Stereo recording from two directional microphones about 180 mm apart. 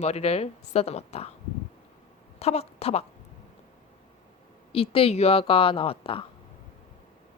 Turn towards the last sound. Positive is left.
turn(degrees=30)  # may be behind; listen again after turning